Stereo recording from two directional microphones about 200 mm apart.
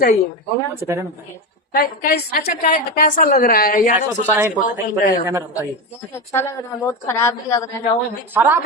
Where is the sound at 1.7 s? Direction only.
45° left (ahead or behind).